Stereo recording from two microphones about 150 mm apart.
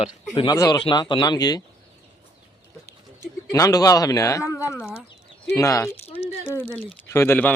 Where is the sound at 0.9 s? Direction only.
35° left (ahead or behind).